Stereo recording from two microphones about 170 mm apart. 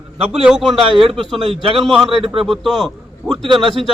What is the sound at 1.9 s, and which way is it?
Speech, centre (ahead or behind).